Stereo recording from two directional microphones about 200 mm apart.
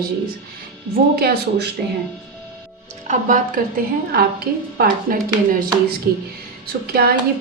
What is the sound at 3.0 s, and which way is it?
Speech, 40° right (ahead or behind).